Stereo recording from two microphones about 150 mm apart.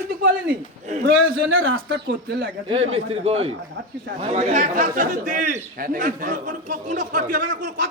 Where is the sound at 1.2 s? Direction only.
85° right.